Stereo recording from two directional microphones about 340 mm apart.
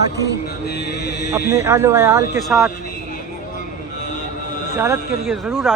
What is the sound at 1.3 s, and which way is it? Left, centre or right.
Speech, centre.